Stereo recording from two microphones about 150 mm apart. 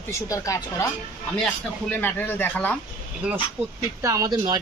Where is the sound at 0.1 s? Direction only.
20° left (ahead or behind).